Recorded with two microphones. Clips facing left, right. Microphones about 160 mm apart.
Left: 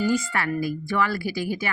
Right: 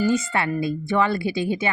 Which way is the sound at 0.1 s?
25° right (ahead or behind).